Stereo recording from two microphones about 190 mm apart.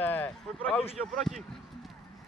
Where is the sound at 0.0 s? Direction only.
10° left (ahead or behind).